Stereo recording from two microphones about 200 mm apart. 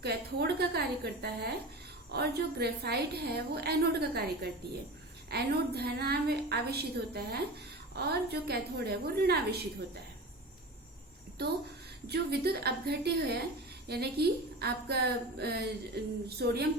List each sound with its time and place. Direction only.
0.0 s a sound: 55° right (ahead or behind)
2.1 s a woman's voice: 55° right (ahead or behind)
11.4 s a woman's voice: 55° right (ahead or behind)